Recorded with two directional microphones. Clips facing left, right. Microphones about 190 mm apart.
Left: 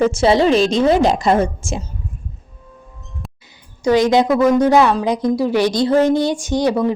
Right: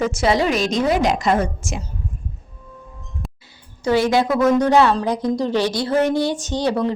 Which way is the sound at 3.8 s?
15° left (ahead or behind).